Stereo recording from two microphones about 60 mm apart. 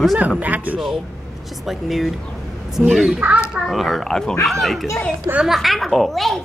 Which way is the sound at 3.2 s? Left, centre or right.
Right.